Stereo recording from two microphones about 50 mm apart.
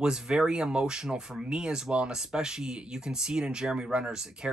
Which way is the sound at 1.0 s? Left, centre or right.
Centre.